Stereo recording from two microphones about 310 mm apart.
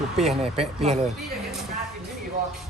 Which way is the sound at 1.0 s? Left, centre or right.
Centre.